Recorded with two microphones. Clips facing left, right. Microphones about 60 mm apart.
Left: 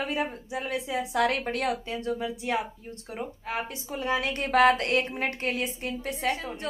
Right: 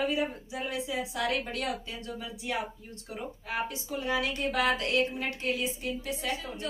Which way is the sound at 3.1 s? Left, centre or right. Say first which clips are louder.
Left 2 dB; left.